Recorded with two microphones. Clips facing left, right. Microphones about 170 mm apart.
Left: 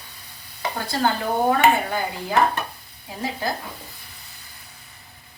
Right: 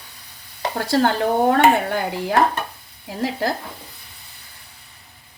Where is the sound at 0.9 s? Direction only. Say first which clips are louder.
Right 5 dB; 70° right (ahead or behind).